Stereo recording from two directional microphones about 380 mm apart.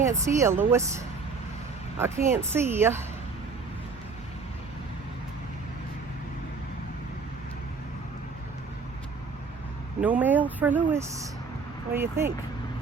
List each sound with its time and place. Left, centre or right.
0.0 s speech: centre
10.0 s speech: centre